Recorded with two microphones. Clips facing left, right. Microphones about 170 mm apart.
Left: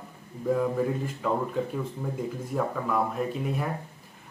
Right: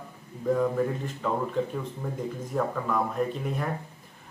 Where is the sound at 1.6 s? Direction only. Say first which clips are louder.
Even; 5° left (ahead or behind).